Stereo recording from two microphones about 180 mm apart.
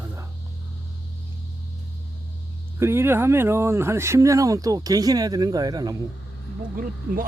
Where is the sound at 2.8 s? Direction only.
15° right (ahead or behind).